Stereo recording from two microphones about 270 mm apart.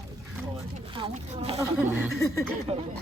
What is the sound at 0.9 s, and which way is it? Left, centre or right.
Speech, centre.